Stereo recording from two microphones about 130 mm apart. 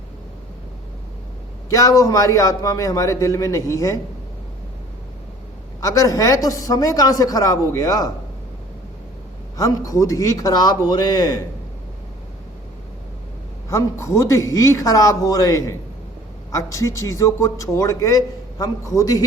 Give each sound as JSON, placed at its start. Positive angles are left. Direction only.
{"t": 1.7, "sound": "a man's voice", "side_deg": 25}
{"t": 5.8, "sound": "a man's voice", "side_deg": 25}
{"t": 9.6, "sound": "a man's voice", "side_deg": 25}
{"t": 13.7, "sound": "a man's voice", "side_deg": 20}